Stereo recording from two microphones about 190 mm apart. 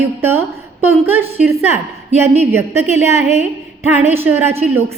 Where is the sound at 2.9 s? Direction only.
10° right (ahead or behind).